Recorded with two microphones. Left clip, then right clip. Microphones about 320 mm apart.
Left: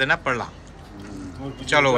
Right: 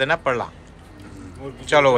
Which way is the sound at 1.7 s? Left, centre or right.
Centre.